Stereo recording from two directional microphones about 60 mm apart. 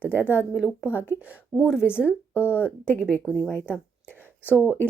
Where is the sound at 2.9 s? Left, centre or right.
Left.